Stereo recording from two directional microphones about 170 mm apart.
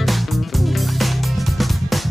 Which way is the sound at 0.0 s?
Centre (ahead or behind).